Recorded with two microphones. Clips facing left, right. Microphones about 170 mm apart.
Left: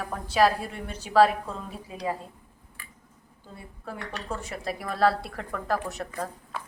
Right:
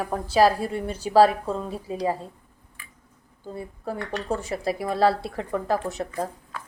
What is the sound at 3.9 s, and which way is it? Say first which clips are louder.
A woman's voice: right 6 dB; 35° right (ahead or behind).